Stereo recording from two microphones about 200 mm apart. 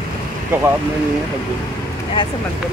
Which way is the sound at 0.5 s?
10° right (ahead or behind).